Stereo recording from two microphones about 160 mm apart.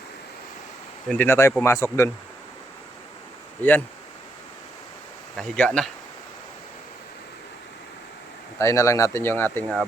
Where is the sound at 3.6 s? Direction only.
10° left (ahead or behind).